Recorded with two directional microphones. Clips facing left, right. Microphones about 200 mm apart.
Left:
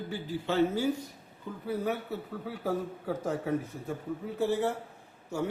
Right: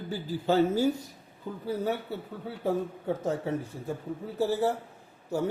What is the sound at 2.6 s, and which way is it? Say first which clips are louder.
A man's voice: right 4 dB; 25° right (ahead or behind).